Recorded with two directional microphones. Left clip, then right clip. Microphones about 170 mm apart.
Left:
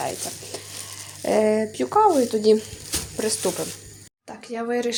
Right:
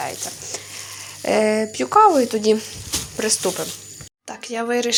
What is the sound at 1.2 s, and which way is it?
Speech, centre (ahead or behind).